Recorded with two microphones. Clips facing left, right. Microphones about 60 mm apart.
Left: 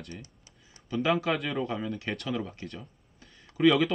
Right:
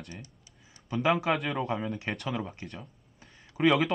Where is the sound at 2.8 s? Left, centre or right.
Centre.